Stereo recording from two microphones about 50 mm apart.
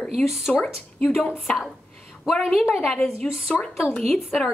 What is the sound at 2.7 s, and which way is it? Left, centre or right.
Speech, centre.